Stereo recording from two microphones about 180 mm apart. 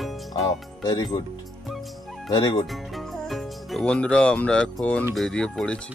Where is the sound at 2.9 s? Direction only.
Centre (ahead or behind).